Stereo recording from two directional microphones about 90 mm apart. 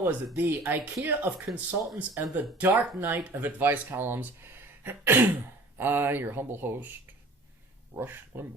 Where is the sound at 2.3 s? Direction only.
20° right (ahead or behind).